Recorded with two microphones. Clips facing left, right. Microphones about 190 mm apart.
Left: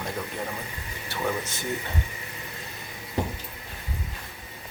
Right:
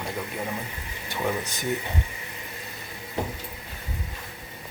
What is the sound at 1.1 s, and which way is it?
Speech, 15° right (ahead or behind).